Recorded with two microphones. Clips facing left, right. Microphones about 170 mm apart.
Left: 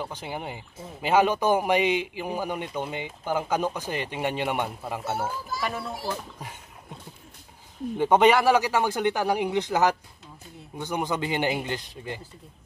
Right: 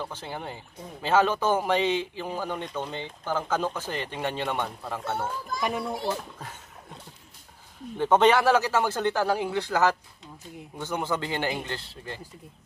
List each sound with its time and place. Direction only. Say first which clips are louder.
0.0 s a man's voice: left 2 dB; 15° left (ahead or behind)
5.6 s a child's voice: right 4 dB; 15° right (ahead or behind)
8.0 s a man's voice: left 1 dB; 10° left (ahead or behind)